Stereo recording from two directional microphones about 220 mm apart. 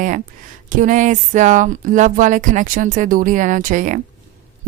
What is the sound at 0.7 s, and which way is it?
A woman's voice, 35° right (ahead or behind).